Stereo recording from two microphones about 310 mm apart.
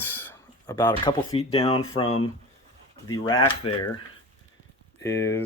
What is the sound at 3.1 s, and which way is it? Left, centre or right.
Speech, centre.